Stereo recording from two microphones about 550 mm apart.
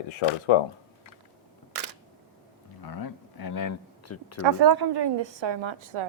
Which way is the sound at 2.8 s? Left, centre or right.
Left.